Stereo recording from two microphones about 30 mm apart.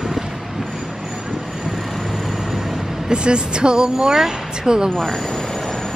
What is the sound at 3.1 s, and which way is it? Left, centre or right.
Speech, right.